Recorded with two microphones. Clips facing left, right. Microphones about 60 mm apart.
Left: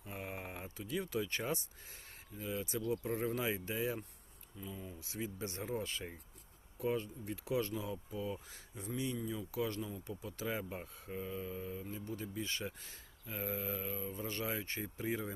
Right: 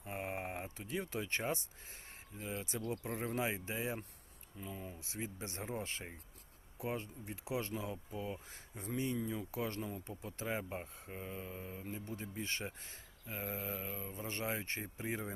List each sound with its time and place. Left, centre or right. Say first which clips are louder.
0.0 s speech: right 3 dB; right
4.5 s speech: even; right
4.9 s speech: left 2 dB; right
8.7 s speech: even; right
9.0 s speech: right 1 dB; right